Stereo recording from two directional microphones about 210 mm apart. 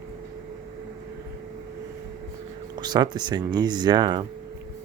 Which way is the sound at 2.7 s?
20° right (ahead or behind).